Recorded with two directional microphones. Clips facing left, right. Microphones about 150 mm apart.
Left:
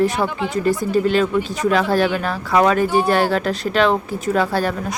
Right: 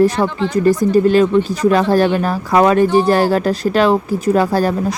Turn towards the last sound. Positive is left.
turn(degrees=-40)  # may be behind; listen again after turning